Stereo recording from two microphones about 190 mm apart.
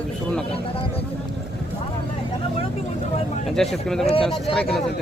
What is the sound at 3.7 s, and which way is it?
Speech, centre (ahead or behind).